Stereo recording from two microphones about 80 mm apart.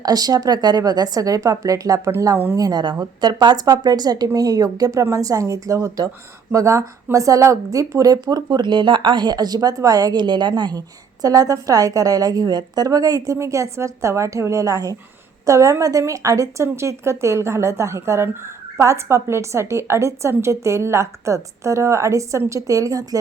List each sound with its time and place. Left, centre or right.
0.0 s speech: right
2.6 s a woman's voice: right
13.3 s a woman's voice: right